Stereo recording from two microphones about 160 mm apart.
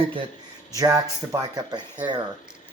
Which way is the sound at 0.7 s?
20° right (ahead or behind).